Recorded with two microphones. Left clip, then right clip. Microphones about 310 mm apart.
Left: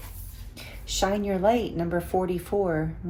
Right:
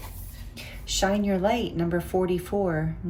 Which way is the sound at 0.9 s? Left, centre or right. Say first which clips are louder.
Right 1 dB; centre.